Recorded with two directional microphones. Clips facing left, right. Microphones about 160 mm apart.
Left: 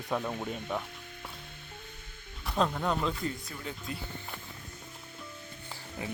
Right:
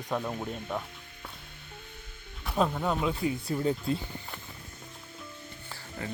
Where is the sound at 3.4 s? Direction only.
35° right (ahead or behind).